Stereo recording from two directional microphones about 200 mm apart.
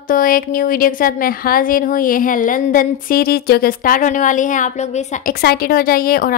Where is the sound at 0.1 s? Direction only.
45° left (ahead or behind).